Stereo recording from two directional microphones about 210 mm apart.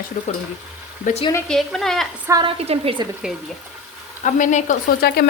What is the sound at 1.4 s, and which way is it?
Speech, centre (ahead or behind).